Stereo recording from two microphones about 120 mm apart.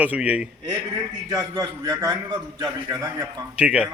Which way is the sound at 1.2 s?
35° right (ahead or behind).